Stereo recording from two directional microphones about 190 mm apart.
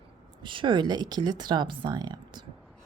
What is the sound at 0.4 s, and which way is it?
Speech, 25° right (ahead or behind).